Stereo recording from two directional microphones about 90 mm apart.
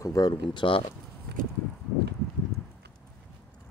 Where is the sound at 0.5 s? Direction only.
70° left (ahead or behind).